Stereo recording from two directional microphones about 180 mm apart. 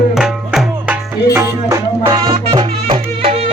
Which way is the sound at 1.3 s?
15° right (ahead or behind).